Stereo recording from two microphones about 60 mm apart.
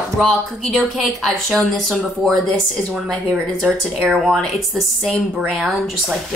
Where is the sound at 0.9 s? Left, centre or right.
Centre.